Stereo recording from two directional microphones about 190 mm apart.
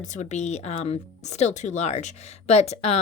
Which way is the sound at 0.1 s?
40° left (ahead or behind).